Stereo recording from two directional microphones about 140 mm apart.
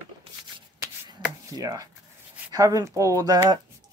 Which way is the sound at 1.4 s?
25° right (ahead or behind).